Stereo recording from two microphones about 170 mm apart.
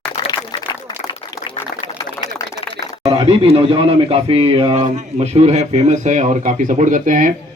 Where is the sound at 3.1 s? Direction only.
30° right (ahead or behind).